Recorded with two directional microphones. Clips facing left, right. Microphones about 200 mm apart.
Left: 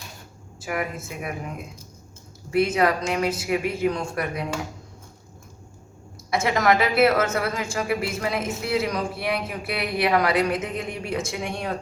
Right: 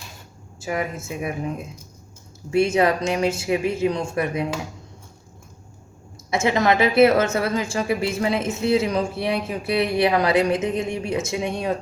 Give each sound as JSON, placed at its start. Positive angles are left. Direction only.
{"t": 0.6, "sound": "a woman's voice", "side_deg": -25}
{"t": 2.5, "sound": "a woman's voice", "side_deg": -25}
{"t": 6.3, "sound": "a woman's voice", "side_deg": -25}